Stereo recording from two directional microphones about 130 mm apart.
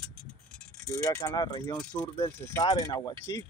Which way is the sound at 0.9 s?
25° left (ahead or behind).